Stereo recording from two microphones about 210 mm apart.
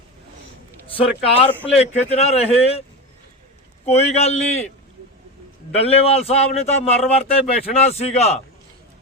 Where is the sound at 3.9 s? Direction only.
30° left (ahead or behind).